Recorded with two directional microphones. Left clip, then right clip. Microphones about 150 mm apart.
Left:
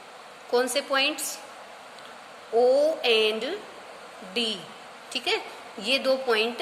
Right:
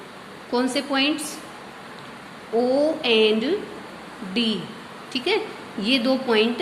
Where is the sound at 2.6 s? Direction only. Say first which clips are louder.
Even; 45° left (ahead or behind).